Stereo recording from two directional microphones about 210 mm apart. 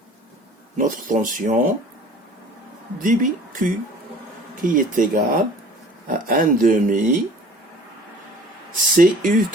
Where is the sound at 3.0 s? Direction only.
40° right (ahead or behind).